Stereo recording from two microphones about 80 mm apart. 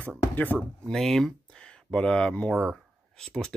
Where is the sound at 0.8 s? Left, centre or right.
Centre.